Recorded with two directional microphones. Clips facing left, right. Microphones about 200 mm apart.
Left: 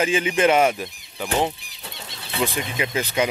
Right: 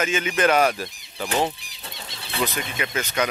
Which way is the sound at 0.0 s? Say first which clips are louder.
Left 3 dB; 30° left (ahead or behind).